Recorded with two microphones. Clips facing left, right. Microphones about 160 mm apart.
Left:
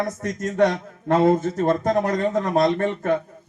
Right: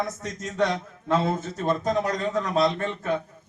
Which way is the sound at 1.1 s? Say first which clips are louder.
Left 7 dB; 60° left (ahead or behind).